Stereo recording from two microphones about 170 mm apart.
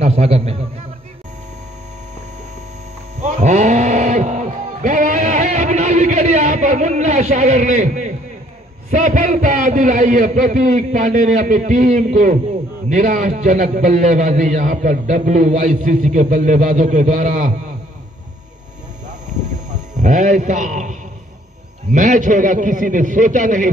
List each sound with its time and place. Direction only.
0.0 s a man's voice: 40° right (ahead or behind)
3.2 s music: 40° right (ahead or behind)
8.9 s a man's voice: 50° right (ahead or behind)
20.0 s a man's voice: 45° right (ahead or behind)